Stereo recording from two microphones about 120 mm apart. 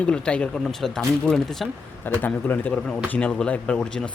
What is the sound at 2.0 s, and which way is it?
Speech, 15° left (ahead or behind).